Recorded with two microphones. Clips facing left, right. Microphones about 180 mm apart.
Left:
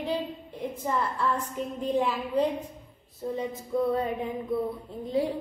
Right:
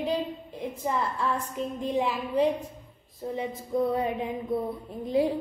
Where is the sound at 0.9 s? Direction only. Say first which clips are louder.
Even; 10° right (ahead or behind).